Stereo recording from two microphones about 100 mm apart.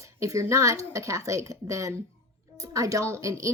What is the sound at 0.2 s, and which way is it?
A woman's voice, 30° right (ahead or behind).